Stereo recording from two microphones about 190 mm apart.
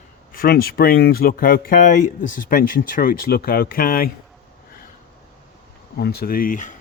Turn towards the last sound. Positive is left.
turn(degrees=40)  # may be behind; listen again after turning